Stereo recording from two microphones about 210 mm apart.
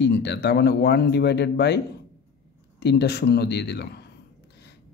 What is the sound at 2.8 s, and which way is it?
A man's voice, 50° left (ahead or behind).